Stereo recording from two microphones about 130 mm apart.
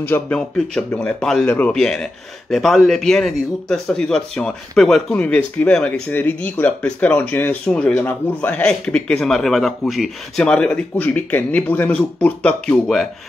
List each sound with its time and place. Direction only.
0.0 s a man's voice: 15° left (ahead or behind)